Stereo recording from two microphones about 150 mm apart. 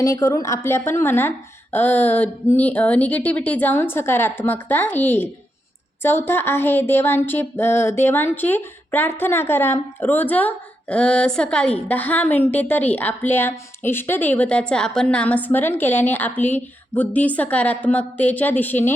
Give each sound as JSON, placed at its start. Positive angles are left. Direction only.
{"t": 0.0, "sound": "speech", "side_deg": 20}